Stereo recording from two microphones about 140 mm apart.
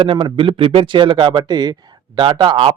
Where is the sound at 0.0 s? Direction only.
40° right (ahead or behind).